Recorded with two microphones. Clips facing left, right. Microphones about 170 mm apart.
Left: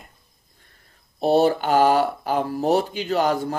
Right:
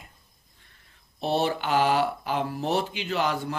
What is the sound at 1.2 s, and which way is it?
Speech, 40° left (ahead or behind).